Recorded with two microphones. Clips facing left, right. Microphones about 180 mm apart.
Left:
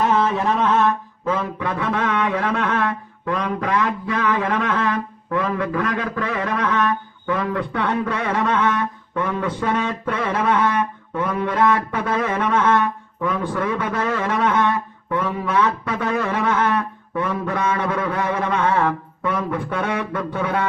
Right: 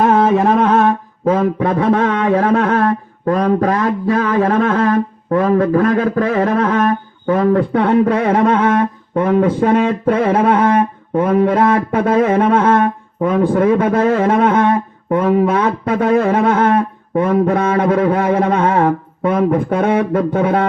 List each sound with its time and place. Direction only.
0.0 s mantra: 45° right (ahead or behind)
0.3 s mantra: 55° right (ahead or behind)
0.7 s mantra: 40° right (ahead or behind)
17.2 s mantra: 50° right (ahead or behind)
17.6 s a sound: 40° right (ahead or behind)
18.3 s mantra: 40° right (ahead or behind)